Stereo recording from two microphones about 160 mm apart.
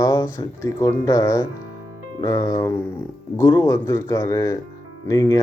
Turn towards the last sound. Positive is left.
turn(degrees=20)  # may be behind; listen again after turning